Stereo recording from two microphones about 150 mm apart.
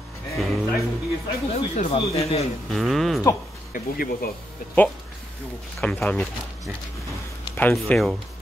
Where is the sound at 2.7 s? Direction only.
Centre (ahead or behind).